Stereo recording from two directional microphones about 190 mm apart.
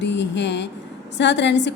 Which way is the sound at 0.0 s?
70° left (ahead or behind).